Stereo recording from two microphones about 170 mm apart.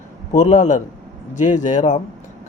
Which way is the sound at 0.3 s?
45° left (ahead or behind).